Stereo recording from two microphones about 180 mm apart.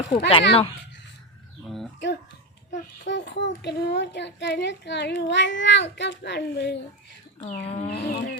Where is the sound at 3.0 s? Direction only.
80° left.